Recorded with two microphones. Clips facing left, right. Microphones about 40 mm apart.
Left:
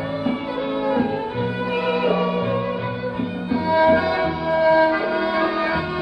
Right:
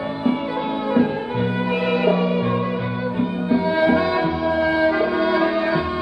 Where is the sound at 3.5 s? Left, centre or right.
Right.